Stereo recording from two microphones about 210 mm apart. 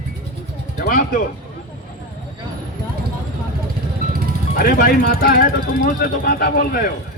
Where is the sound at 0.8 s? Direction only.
45° left (ahead or behind).